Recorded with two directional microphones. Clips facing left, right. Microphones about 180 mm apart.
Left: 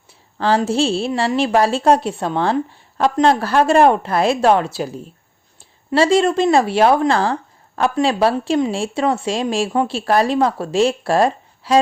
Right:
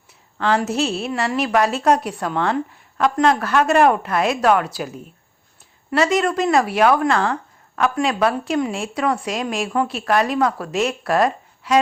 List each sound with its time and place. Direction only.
0.1 s a woman's voice: 30° left (ahead or behind)